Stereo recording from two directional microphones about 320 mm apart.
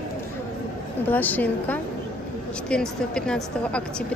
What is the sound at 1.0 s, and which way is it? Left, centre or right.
A woman's voice, centre.